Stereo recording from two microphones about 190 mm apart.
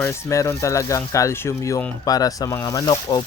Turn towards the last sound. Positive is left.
turn(degrees=25)  # may be behind; listen again after turning